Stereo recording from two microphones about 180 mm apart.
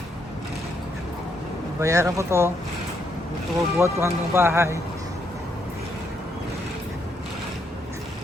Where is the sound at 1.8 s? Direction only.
15° right (ahead or behind).